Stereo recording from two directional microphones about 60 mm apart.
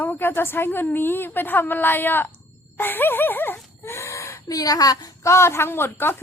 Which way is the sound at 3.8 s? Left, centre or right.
Left.